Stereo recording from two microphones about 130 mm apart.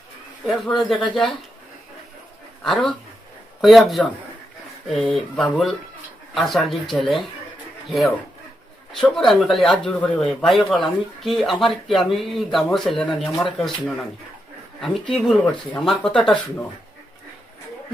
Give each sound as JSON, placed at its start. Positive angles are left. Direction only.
{"t": 0.4, "sound": "speech", "side_deg": 0}
{"t": 2.6, "sound": "speech", "side_deg": 0}